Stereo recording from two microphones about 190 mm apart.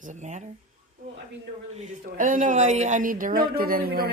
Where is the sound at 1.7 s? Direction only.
40° right (ahead or behind).